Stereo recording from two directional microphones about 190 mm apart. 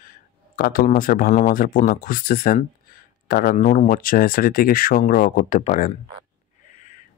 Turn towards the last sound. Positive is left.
turn(degrees=40)  # may be behind; listen again after turning